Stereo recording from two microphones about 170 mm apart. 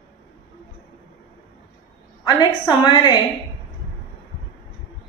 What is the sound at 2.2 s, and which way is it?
Speech, 25° left (ahead or behind).